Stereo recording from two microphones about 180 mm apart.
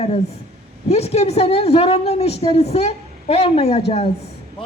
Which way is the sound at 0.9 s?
35° left (ahead or behind).